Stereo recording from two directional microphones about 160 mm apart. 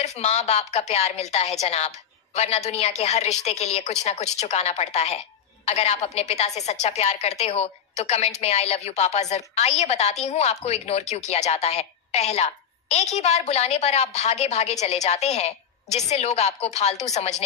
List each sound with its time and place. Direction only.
0.0 s a woman's voice: 45° left (ahead or behind)